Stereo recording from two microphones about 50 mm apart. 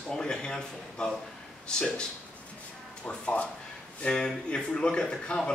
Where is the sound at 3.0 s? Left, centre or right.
Left.